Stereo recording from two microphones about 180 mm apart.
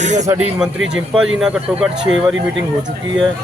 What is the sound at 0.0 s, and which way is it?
Speech, 40° right (ahead or behind).